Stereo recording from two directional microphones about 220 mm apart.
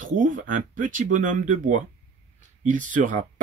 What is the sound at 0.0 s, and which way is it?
Speech, 35° right (ahead or behind).